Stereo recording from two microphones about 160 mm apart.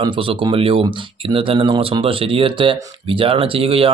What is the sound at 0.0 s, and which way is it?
Speech, 30° right (ahead or behind).